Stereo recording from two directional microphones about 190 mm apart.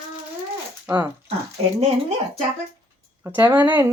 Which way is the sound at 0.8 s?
10° right (ahead or behind).